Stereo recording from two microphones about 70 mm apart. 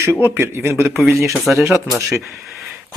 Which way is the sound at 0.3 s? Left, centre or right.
Right.